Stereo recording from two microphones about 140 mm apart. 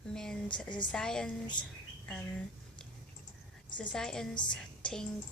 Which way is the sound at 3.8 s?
5° left (ahead or behind).